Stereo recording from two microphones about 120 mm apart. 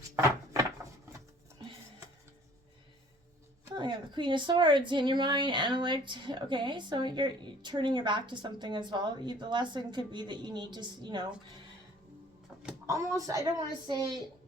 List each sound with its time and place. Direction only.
3.8 s a woman's voice: 40° right (ahead or behind)
12.8 s speech: 25° right (ahead or behind)